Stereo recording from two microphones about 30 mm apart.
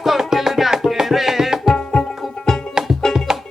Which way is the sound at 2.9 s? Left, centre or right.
Centre.